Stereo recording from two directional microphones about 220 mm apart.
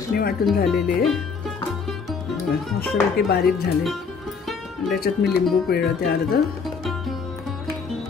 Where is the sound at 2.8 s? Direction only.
45° left (ahead or behind).